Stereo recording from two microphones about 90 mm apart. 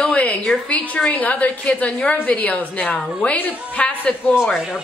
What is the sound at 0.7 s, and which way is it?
A woman's voice, 15° left (ahead or behind).